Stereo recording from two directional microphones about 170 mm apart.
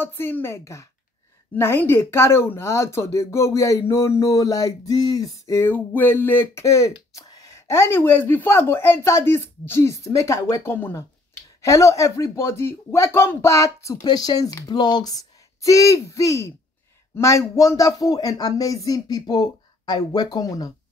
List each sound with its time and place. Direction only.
0.0 s speech: 15° left (ahead or behind)